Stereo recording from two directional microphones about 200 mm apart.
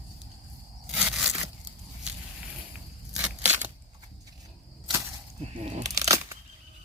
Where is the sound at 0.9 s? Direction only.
Centre (ahead or behind).